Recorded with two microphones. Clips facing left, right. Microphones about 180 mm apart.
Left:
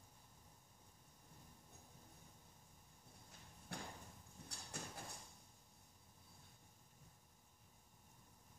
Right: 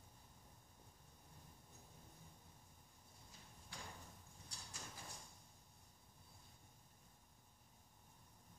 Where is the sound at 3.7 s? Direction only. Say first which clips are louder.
Left 5 dB; 60° left (ahead or behind).